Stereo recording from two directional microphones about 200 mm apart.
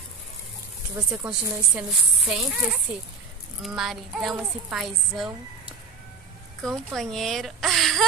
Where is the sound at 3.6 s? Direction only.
Centre (ahead or behind).